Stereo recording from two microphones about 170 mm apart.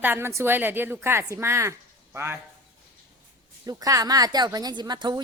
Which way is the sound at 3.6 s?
20° right (ahead or behind).